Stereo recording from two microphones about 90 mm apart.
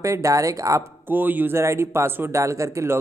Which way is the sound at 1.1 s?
20° right (ahead or behind).